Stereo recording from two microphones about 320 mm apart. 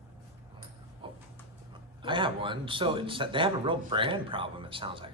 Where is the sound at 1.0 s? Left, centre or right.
Centre.